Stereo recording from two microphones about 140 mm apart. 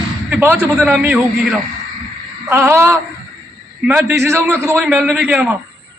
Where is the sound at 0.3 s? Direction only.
15° right (ahead or behind).